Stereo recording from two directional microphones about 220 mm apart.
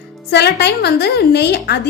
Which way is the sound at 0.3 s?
50° left (ahead or behind).